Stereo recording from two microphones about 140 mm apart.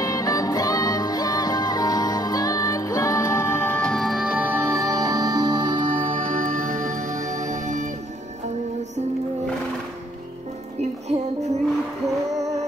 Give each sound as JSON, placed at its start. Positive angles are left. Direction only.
{"t": 0.0, "sound": "music", "side_deg": 25}
{"t": 6.4, "sound": "music", "side_deg": -70}
{"t": 10.8, "sound": "music", "side_deg": -55}